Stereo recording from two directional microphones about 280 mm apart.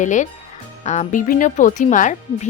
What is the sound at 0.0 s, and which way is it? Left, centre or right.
Speech, left.